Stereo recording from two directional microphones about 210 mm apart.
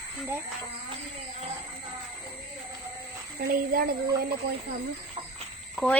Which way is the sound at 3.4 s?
45° right (ahead or behind).